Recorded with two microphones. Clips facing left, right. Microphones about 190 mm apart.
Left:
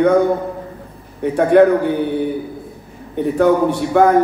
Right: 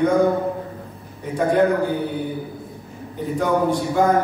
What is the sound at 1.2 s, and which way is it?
Speech, 70° left (ahead or behind).